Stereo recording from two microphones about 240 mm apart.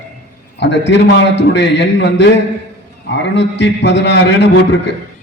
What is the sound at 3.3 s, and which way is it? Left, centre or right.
A man's voice, left.